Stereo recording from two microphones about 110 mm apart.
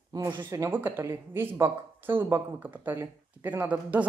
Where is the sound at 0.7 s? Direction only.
20° right (ahead or behind).